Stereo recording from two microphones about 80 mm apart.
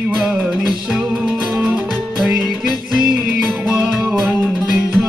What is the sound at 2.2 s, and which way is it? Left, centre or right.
Music, centre.